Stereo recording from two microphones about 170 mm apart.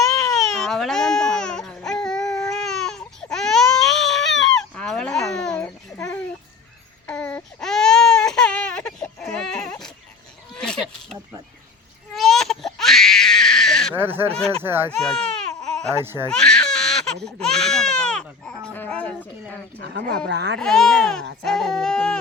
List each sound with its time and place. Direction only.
0.3 s baby cry: centre (ahead or behind)
10.5 s a sound: 5° left (ahead or behind)
12.1 s baby cry: centre (ahead or behind)
13.9 s honk: 10° right (ahead or behind)
14.6 s a child's voice: 15° right (ahead or behind)
14.9 s baby cry: 5° left (ahead or behind)
16.0 s a child's voice: 15° right (ahead or behind)
16.3 s baby cry: 5° left (ahead or behind)
19.8 s a sound: 80° right
20.2 s speech: 80° right
20.6 s a child's voice: 5° left (ahead or behind)
21.4 s a sound: 5° left (ahead or behind)